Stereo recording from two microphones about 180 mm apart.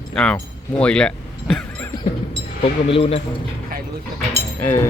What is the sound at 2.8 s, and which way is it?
Speech, 30° left (ahead or behind).